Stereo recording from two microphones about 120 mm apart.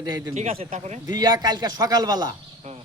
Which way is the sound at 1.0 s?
35° right (ahead or behind).